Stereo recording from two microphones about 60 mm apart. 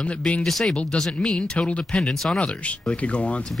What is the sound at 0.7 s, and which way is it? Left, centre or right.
Speech, left.